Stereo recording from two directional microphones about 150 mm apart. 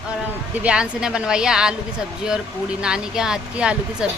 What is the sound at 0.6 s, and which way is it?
A woman's voice, 5° right (ahead or behind).